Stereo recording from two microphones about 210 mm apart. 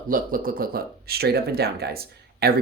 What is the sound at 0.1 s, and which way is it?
Speech, 40° right (ahead or behind).